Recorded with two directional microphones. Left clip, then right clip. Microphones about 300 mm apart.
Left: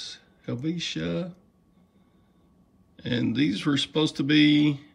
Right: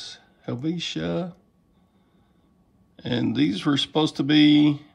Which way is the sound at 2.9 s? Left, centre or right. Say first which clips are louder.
Right 2 dB; centre.